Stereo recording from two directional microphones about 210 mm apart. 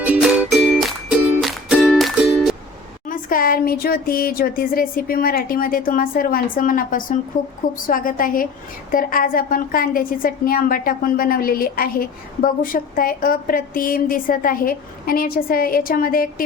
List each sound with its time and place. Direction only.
0.0 s music: 5° right (ahead or behind)
3.1 s a woman's voice: 40° left (ahead or behind)